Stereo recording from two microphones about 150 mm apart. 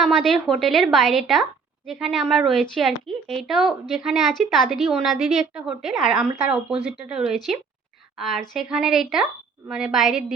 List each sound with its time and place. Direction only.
0.0 s a woman's voice: 5° left (ahead or behind)
6.3 s speech: 40° right (ahead or behind)
6.8 s a woman's voice: 5° right (ahead or behind)